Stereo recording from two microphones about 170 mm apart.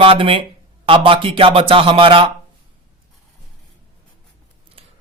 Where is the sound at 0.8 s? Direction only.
30° right (ahead or behind).